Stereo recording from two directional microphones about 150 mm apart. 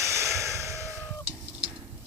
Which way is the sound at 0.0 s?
20° right (ahead or behind).